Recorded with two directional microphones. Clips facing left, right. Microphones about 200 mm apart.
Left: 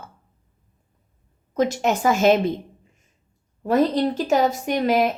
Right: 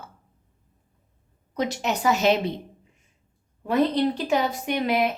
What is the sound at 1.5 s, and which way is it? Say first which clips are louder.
A woman's voice: left 5 dB; 45° left (ahead or behind).